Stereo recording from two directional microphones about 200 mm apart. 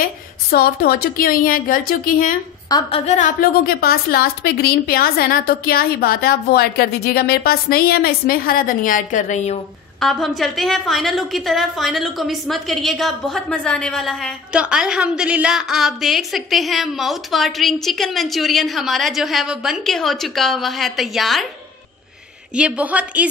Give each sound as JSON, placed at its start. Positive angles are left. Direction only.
{"t": 0.5, "sound": "a woman's voice", "side_deg": 50}
{"t": 2.7, "sound": "a woman's voice", "side_deg": 30}
{"t": 9.9, "sound": "a woman's voice", "side_deg": 0}
{"t": 22.6, "sound": "a woman's voice", "side_deg": -5}